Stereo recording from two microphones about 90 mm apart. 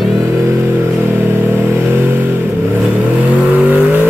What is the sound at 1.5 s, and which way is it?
Vehicle, 25° right (ahead or behind).